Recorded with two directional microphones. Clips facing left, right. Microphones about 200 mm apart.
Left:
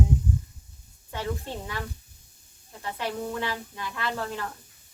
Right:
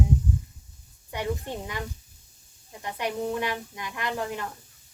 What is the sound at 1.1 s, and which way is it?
Speech, 15° right (ahead or behind).